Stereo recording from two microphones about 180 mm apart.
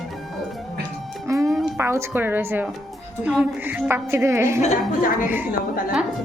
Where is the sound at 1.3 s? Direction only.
15° right (ahead or behind).